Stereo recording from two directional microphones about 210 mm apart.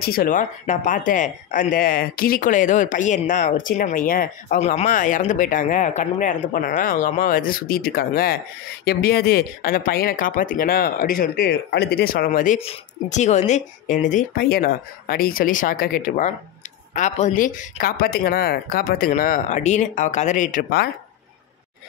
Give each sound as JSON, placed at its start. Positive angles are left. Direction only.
{"t": 0.0, "sound": "speech", "side_deg": 45}
{"t": 12.5, "sound": "speech", "side_deg": 30}